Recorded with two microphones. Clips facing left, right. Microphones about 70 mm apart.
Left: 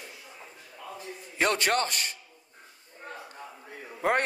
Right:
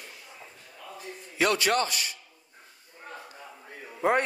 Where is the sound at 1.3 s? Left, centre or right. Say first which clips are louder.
Right 1 dB; left.